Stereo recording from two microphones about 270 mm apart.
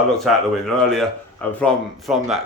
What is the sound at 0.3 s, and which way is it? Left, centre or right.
Speech, centre.